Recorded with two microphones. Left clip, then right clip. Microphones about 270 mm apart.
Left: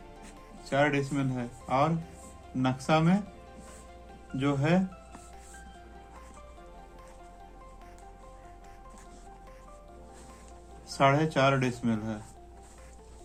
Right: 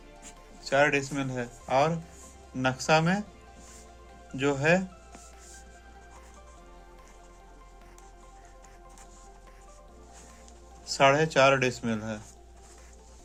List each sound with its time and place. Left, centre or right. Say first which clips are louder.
0.6 s speech: right 3 dB; right
4.4 s speech: right 4 dB; right
10.9 s speech: right 3 dB; right